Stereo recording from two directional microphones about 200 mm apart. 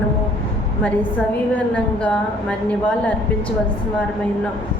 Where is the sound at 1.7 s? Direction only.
5° left (ahead or behind).